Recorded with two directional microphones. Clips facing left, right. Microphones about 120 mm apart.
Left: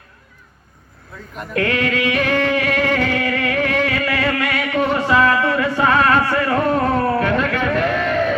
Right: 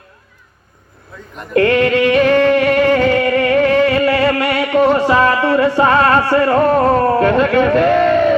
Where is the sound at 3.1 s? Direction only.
30° right (ahead or behind).